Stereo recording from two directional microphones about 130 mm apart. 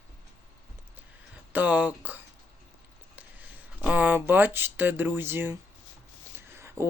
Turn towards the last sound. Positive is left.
turn(degrees=-20)  # may be behind; listen again after turning